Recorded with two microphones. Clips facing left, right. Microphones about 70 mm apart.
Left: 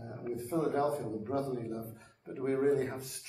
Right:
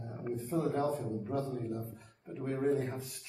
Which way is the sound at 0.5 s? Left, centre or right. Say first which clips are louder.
Left 2 dB; left.